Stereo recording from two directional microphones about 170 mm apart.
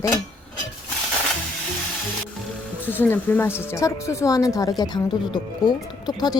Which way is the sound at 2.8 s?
10° left (ahead or behind).